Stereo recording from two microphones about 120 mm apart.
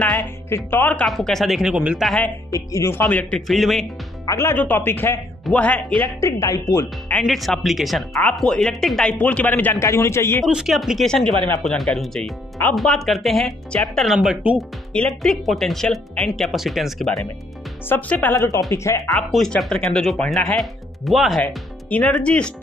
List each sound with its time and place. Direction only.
0.7 s speech: 15° left (ahead or behind)
1.0 s speech: centre (ahead or behind)
2.0 s speech: 10° left (ahead or behind)
2.5 s speech: 25° left (ahead or behind); by 3.8 s centre (ahead or behind)
4.3 s speech: 20° left (ahead or behind)
6.2 s speech: 25° left (ahead or behind)
7.2 s speech: centre (ahead or behind); by 10.4 s 20° left (ahead or behind)
10.4 s speech: 5° right (ahead or behind)
14.9 s speech: 5° left (ahead or behind)
17.8 s speech: 15° left (ahead or behind)
18.3 s speech: 25° left (ahead or behind)
19.1 s speech: 5° left (ahead or behind)
21.9 s speech: 10° left (ahead or behind)